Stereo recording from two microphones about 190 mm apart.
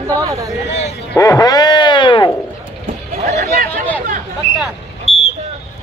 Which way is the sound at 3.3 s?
50° right (ahead or behind).